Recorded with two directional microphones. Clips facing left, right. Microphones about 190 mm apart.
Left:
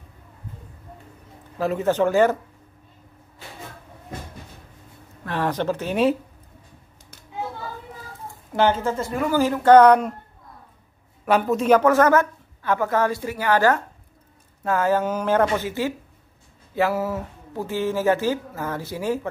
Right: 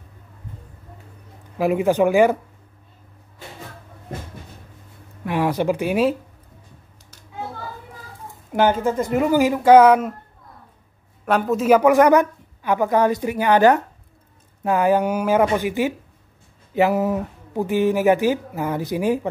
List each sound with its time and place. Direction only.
1.6 s speech: 10° right (ahead or behind)
5.2 s speech: 10° right (ahead or behind)
8.5 s speech: 10° right (ahead or behind)
11.2 s speech: centre (ahead or behind); by 19.2 s 15° right (ahead or behind)